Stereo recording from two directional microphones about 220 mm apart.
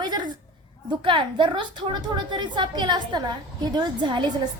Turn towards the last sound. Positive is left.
turn(degrees=-20)  # may be behind; listen again after turning